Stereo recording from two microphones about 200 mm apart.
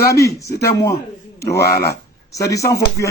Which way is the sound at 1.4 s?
55° left (ahead or behind).